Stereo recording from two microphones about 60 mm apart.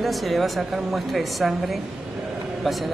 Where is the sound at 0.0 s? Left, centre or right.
Centre.